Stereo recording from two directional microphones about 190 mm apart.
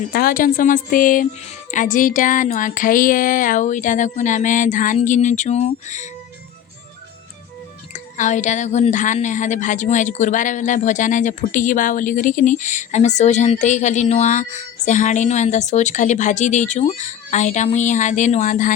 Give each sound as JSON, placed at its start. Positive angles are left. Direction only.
{"t": 0.1, "sound": "a woman's voice", "side_deg": 50}
{"t": 7.9, "sound": "a woman's voice", "side_deg": 40}